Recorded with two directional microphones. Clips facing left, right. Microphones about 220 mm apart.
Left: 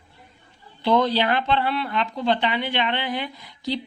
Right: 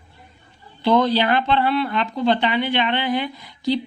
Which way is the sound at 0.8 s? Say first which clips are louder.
Right 3 dB; 55° right (ahead or behind).